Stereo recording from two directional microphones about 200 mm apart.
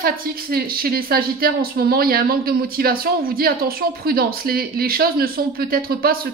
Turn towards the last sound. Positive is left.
turn(degrees=-45)  # may be behind; listen again after turning